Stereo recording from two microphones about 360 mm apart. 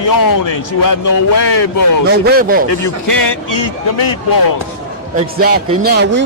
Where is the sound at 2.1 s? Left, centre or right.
Right.